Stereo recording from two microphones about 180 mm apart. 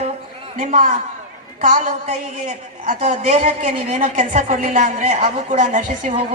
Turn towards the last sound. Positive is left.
turn(degrees=-45)  # may be behind; listen again after turning